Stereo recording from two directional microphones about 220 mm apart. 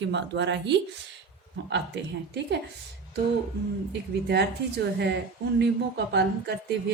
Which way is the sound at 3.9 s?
50° right (ahead or behind).